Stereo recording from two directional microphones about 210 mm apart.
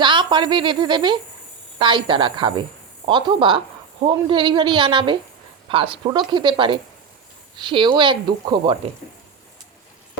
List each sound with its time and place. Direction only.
0.0 s speech: 20° right (ahead or behind)